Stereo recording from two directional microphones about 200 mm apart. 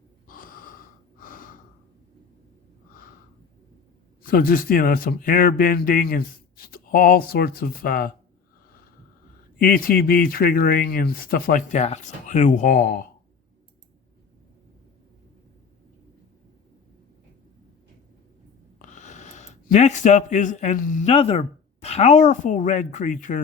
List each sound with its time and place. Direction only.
0.3 s snort: 45° left (ahead or behind)
4.2 s speech: 50° left (ahead or behind)
9.6 s speech: 45° left (ahead or behind)
18.8 s a sound: 35° left (ahead or behind)
21.1 s speech: 30° left (ahead or behind)